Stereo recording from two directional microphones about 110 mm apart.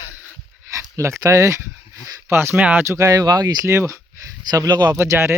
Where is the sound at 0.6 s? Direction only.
25° right (ahead or behind).